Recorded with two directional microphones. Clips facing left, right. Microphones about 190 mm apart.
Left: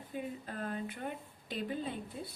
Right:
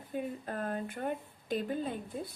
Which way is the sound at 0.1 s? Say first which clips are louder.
Right 4 dB; 50° right (ahead or behind).